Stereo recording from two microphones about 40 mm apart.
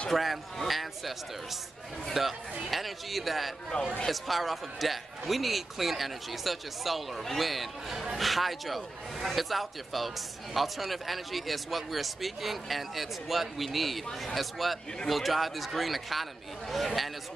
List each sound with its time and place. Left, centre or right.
0.1 s a man's voice: centre
3.7 s a man's voice: left
4.1 s a man's voice: centre